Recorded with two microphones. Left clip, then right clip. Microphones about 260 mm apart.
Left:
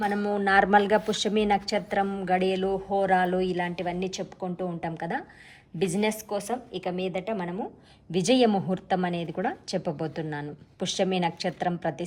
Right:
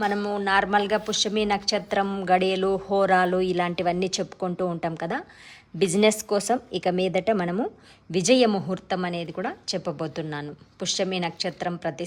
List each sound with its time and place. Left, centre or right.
0.0 s a woman's voice: centre
8.1 s a woman's voice: centre